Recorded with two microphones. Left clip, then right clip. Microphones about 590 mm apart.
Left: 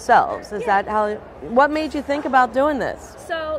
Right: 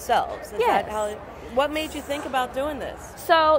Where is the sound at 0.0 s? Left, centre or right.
Left.